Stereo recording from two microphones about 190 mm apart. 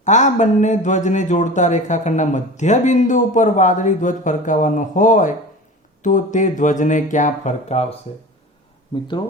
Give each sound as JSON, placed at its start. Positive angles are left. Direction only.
{"t": 0.0, "sound": "speech", "side_deg": 40}